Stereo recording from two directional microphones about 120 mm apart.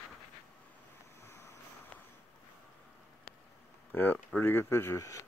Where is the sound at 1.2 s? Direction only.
25° left (ahead or behind).